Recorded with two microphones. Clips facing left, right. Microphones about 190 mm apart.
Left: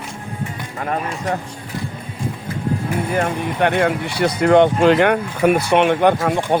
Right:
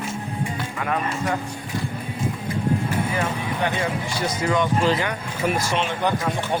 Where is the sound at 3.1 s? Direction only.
55° left (ahead or behind).